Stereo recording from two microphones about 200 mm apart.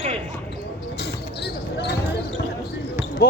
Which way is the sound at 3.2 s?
50° left (ahead or behind).